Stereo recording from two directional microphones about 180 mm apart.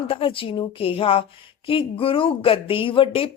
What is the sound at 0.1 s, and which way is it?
Speech, 30° left (ahead or behind).